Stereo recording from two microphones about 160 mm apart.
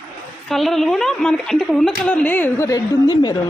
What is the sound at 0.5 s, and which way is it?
A woman's voice, centre (ahead or behind).